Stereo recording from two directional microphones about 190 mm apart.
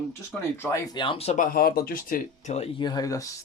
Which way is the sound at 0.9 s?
25° left (ahead or behind).